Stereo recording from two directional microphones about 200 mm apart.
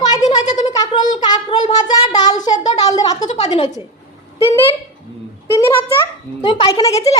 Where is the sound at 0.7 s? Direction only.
20° left (ahead or behind).